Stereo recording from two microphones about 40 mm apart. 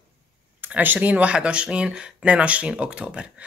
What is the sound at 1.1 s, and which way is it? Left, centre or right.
Speech, right.